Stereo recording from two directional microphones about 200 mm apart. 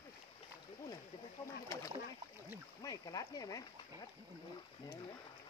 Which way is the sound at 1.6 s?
15° left (ahead or behind).